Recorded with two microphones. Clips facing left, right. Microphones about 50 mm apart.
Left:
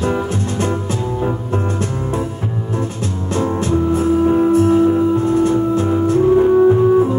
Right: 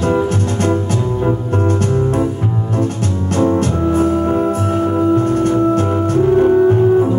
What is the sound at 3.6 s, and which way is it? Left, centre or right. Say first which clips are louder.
Music: right 1 dB; right.